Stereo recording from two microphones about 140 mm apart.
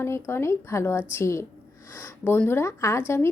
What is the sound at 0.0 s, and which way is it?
Speech, 20° left (ahead or behind).